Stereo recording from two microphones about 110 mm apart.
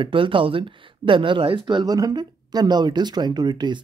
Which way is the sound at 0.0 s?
50° right (ahead or behind).